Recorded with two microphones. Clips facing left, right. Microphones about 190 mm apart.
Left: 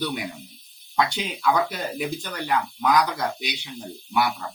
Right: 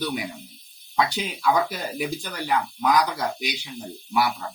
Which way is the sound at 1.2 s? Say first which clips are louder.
Even; 10° right (ahead or behind).